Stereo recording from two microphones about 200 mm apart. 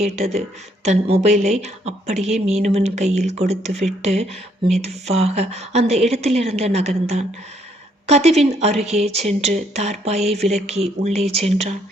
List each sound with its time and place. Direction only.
0.0 s a woman's voice: 30° right (ahead or behind)